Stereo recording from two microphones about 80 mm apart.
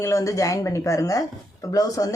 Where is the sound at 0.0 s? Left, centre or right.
Left.